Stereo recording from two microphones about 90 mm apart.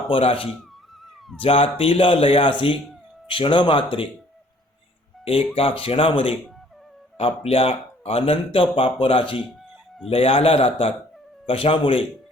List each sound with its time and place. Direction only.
0.1 s speech: 90° left
5.5 s speech: 90° left